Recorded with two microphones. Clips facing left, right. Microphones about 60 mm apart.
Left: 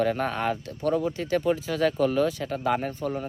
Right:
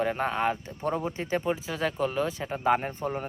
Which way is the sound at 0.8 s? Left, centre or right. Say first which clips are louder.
Left 4 dB; right.